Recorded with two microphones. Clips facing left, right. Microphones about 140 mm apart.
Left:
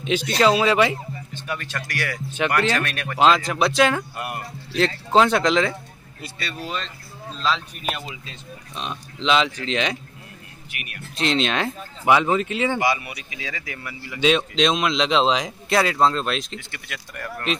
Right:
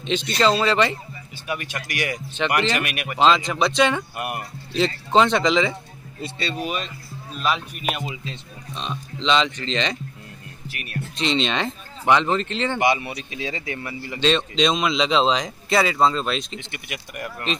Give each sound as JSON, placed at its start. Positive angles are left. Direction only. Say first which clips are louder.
{"t": 0.0, "sound": "speech", "louder": "left 1 dB", "side_deg": 5}
{"t": 1.3, "sound": "speech", "louder": "right 2 dB", "side_deg": -15}
{"t": 3.2, "sound": "speech", "louder": "even", "side_deg": 5}
{"t": 4.2, "sound": "speech", "louder": "right 2 dB", "side_deg": -20}
{"t": 4.7, "sound": "speech", "louder": "even", "side_deg": 0}
{"t": 6.2, "sound": "speech", "louder": "right 5 dB", "side_deg": -20}
{"t": 8.7, "sound": "speech", "louder": "right 1 dB", "side_deg": 5}
{"t": 10.7, "sound": "speech", "louder": "right 1 dB", "side_deg": -35}
{"t": 11.1, "sound": "speech", "louder": "left 1 dB", "side_deg": 0}
{"t": 12.7, "sound": "speech", "louder": "right 2 dB", "side_deg": -25}
{"t": 14.2, "sound": "speech", "louder": "left 1 dB", "side_deg": 5}
{"t": 16.5, "sound": "speech", "louder": "right 2 dB", "side_deg": -20}